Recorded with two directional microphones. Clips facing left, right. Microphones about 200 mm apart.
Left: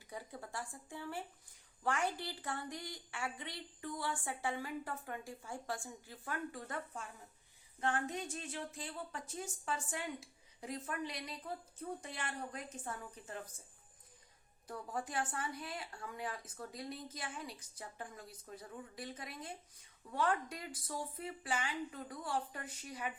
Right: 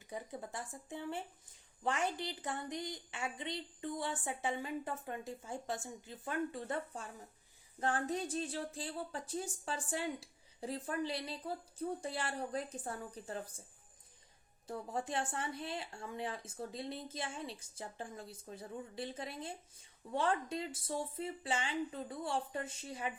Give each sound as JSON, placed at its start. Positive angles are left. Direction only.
{"t": 0.1, "sound": "a woman's voice", "side_deg": -20}
{"t": 14.7, "sound": "a woman's voice", "side_deg": -25}